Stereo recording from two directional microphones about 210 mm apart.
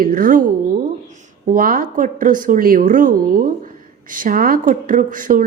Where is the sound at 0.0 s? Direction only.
40° right (ahead or behind).